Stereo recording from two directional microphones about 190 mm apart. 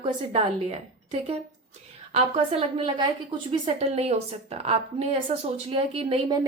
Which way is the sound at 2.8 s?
25° right (ahead or behind).